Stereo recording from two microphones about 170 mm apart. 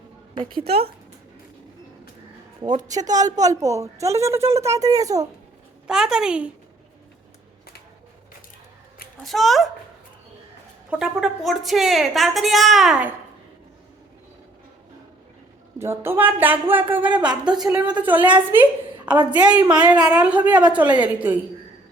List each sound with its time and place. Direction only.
2.6 s a woman's voice: 25° right (ahead or behind)
5.9 s a woman's voice: 5° right (ahead or behind)
9.2 s a woman's voice: centre (ahead or behind)
10.8 s a woman's voice: 5° right (ahead or behind)
15.8 s speech: 15° right (ahead or behind)
17.7 s a woman's voice: 20° right (ahead or behind)